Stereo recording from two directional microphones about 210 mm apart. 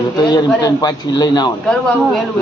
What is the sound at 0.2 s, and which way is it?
A man's voice, 20° left (ahead or behind).